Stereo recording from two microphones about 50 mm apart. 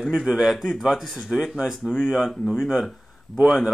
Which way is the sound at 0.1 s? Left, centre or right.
Centre.